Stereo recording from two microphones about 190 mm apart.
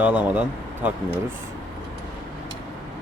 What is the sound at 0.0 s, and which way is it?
Speech, 5° right (ahead or behind).